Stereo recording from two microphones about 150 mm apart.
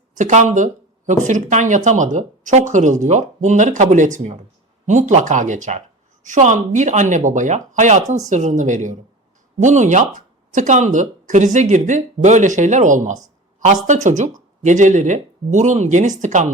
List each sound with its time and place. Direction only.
0.2 s speech: 55° right (ahead or behind)